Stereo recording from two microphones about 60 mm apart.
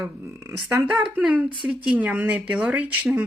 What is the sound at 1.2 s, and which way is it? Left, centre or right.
A woman's voice, centre.